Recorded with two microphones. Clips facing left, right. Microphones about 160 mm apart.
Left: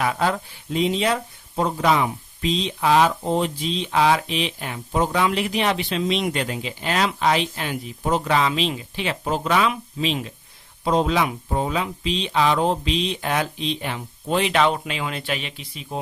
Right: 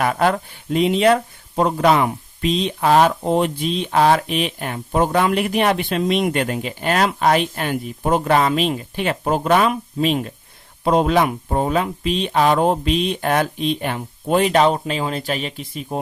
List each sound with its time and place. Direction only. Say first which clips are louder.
0.0 s speech: right 4 dB; 60° right (ahead or behind)